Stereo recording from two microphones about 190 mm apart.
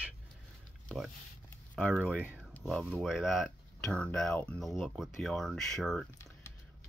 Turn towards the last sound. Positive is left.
turn(degrees=0)  # may be behind; listen again after turning